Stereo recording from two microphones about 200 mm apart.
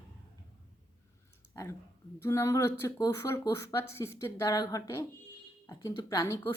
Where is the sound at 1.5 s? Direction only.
15° left (ahead or behind).